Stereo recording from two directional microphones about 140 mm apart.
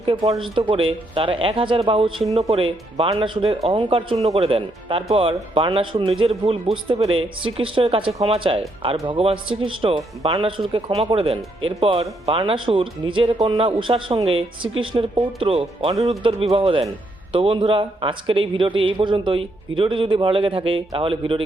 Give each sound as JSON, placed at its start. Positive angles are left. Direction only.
{"t": 0.0, "sound": "speech", "side_deg": -40}